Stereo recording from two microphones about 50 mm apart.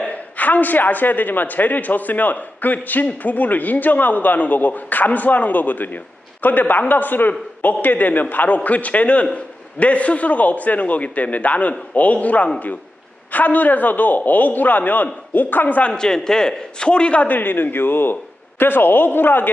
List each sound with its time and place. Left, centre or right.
0.1 s a man's voice: left
15.9 s a man's voice: centre
17.2 s speech: left